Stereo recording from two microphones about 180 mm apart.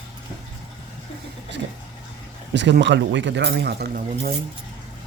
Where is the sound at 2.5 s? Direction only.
80° right; by 4.3 s 60° right (ahead or behind).